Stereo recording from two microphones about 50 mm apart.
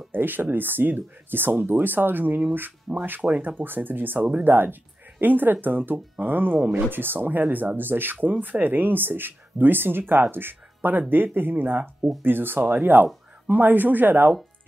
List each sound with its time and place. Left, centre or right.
0.1 s speech: right
3.2 s speech: right
3.4 s speech: right